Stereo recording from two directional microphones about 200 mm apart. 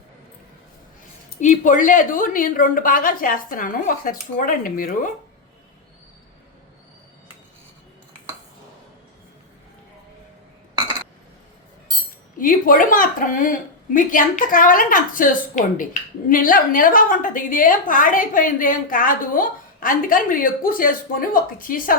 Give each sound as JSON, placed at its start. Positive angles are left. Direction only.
{"t": 1.4, "sound": "a woman's voice", "side_deg": 40}
{"t": 12.4, "sound": "a woman's voice", "side_deg": 45}